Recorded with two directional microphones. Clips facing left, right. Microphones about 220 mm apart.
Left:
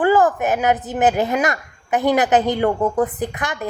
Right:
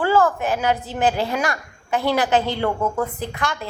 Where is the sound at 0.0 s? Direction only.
20° left (ahead or behind).